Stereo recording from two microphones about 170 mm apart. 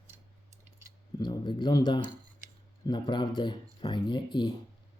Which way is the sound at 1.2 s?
25° left (ahead or behind).